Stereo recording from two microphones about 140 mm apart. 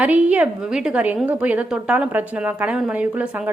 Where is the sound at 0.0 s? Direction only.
10° right (ahead or behind).